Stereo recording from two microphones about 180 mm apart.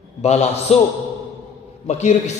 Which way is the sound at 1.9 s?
40° left (ahead or behind).